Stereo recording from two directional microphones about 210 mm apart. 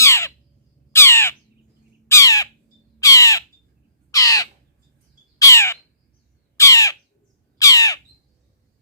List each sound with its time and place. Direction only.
0.0 s squawk: 15° left (ahead or behind)
0.9 s crow: 10° left (ahead or behind)
5.4 s bird: 15° left (ahead or behind)
6.6 s crow: 15° left (ahead or behind)
7.6 s squawk: 15° left (ahead or behind)